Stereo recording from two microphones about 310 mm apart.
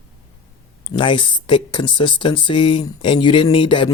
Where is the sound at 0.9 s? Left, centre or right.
Centre.